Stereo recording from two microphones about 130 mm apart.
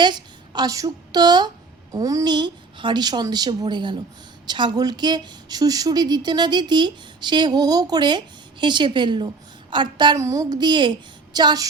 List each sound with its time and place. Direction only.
0.0 s a woman's voice: 35° right (ahead or behind)
10.2 s speech: 25° right (ahead or behind)